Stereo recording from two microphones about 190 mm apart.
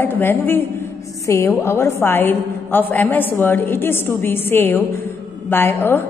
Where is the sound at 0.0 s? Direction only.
10° left (ahead or behind).